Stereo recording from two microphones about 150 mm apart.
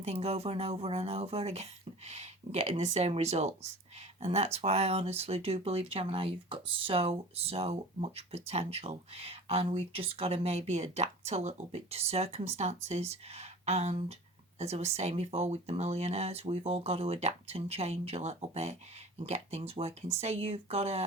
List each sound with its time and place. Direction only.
0.0 s speech: 45° right (ahead or behind)